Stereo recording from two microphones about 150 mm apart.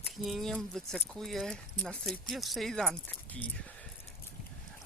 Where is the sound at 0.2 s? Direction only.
Centre (ahead or behind).